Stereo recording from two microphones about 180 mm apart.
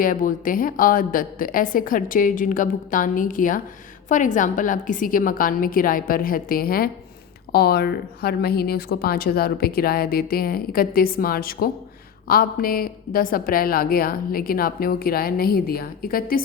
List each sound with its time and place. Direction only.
0.0 s a woman's voice: 50° left (ahead or behind)